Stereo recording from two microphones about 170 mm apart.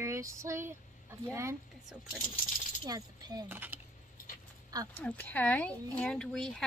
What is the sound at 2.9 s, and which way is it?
Speech, 25° right (ahead or behind).